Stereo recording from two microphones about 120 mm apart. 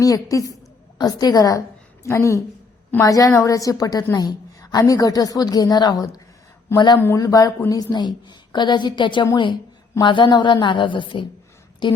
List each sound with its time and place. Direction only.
0.0 s a woman's voice: 30° left (ahead or behind)
7.0 s a woman's voice: 25° left (ahead or behind); by 11.3 s 40° left (ahead or behind)